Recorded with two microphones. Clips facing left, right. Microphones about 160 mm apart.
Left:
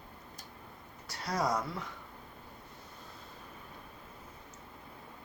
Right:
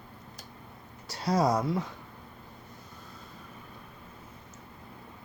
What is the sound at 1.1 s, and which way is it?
Speech, 30° right (ahead or behind).